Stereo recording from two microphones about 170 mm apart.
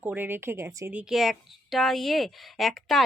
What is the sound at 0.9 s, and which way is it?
A woman's voice, 5° right (ahead or behind).